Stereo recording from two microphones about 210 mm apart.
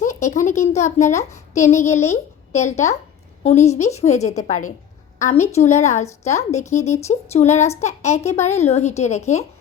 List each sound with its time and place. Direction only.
0.0 s speech: 35° left (ahead or behind)